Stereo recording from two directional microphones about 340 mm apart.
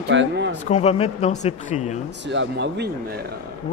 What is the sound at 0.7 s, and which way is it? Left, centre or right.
Speech, centre.